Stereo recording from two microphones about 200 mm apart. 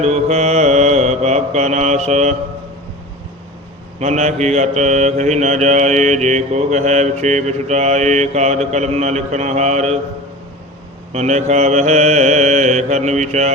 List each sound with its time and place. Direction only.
0.0 s mantra: 35° right (ahead or behind)
4.0 s mantra: 35° right (ahead or behind)
11.1 s mantra: 35° right (ahead or behind)